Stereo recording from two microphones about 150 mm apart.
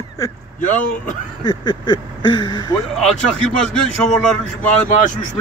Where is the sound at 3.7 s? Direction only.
5° left (ahead or behind).